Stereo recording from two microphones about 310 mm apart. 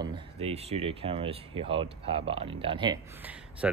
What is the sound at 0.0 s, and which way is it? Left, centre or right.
Speech, centre.